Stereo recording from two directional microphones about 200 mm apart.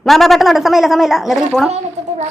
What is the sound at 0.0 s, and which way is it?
A woman's voice, centre (ahead or behind).